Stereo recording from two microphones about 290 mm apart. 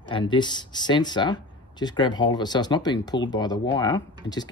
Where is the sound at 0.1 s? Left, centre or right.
Centre.